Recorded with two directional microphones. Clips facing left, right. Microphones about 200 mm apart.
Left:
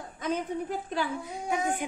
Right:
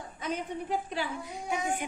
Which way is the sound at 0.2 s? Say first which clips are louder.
Left 4 dB; 50° left (ahead or behind).